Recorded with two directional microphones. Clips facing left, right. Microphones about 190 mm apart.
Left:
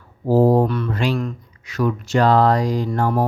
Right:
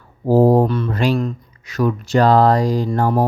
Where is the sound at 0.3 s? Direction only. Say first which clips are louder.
Right 2 dB; 45° right (ahead or behind).